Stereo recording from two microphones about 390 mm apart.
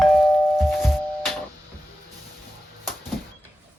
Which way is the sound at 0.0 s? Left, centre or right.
Centre.